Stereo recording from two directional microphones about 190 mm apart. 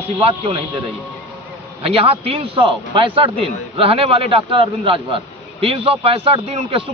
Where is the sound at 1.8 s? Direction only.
30° right (ahead or behind).